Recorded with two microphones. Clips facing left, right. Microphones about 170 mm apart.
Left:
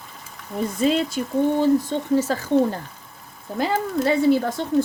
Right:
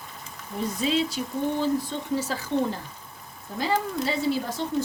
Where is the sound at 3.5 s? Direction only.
60° left (ahead or behind).